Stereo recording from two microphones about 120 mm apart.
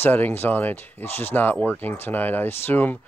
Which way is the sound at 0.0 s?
15° left (ahead or behind).